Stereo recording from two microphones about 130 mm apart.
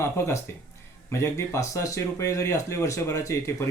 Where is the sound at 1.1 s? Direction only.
25° left (ahead or behind).